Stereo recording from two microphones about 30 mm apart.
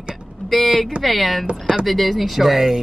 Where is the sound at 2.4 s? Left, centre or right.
Centre.